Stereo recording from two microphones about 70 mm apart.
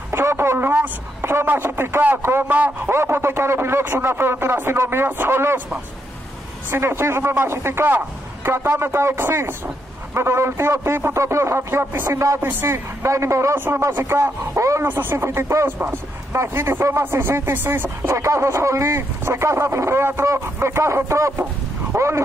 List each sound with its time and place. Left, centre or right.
0.1 s a man's voice: right
2.4 s speech: right
2.9 s a man's voice: right
6.7 s a man's voice: right
12.4 s speech: right
12.6 s a man's voice: right
14.9 s a man's voice: right
18.1 s speech: right